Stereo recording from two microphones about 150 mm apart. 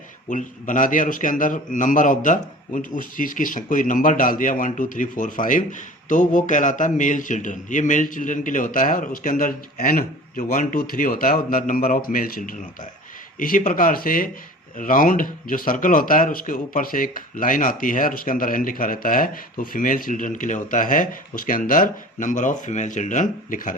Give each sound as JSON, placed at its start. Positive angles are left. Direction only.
{"t": 0.3, "sound": "speech", "side_deg": 60}